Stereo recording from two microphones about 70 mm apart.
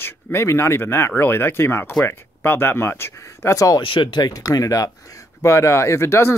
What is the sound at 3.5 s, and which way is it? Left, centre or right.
Speech, left.